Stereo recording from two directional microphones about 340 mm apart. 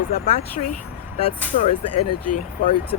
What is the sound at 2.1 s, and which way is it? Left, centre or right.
Speech, left.